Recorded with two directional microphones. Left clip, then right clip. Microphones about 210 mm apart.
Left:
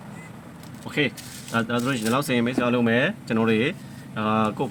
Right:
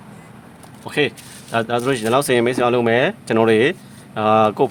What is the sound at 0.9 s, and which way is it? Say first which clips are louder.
Speech: right 5 dB; 55° right (ahead or behind).